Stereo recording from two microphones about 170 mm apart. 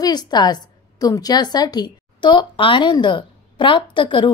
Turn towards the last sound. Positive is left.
turn(degrees=30)  # may be behind; listen again after turning